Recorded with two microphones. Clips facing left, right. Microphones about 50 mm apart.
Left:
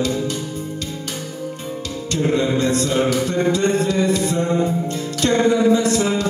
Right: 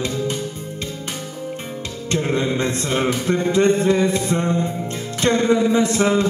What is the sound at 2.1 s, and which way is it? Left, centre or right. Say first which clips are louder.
Music: left 2 dB; right.